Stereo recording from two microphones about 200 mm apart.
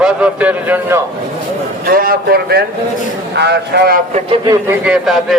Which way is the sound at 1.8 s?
45° right (ahead or behind).